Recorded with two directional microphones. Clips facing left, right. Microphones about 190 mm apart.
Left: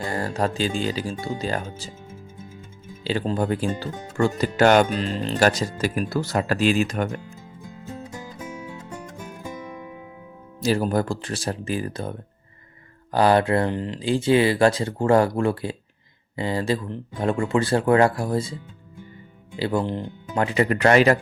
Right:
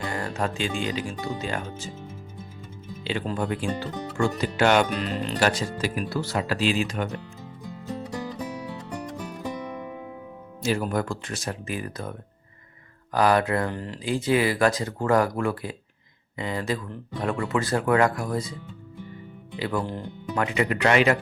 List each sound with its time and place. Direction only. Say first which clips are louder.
0.0 s speech: left 4 dB; 35° left (ahead or behind)
3.1 s speech: left 4 dB; 35° left (ahead or behind)
4.9 s speech: left 2 dB; 30° left (ahead or behind); by 7.2 s 45° left (ahead or behind)
10.6 s speech: left 4 dB; 35° left (ahead or behind)
13.1 s speech: left 3 dB; 30° left (ahead or behind)
19.5 s speech: left 4 dB; 30° left (ahead or behind)